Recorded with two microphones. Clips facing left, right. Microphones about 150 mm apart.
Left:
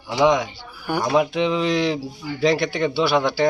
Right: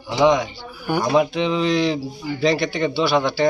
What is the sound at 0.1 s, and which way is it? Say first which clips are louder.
Speech: right 1 dB; 5° left (ahead or behind).